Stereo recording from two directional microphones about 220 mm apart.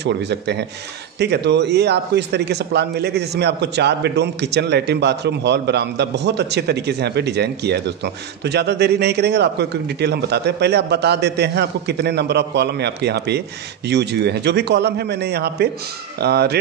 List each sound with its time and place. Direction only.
0.0 s a man's voice: 50° right (ahead or behind)